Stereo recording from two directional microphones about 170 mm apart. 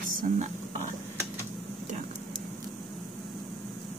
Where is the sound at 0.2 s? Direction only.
45° right (ahead or behind).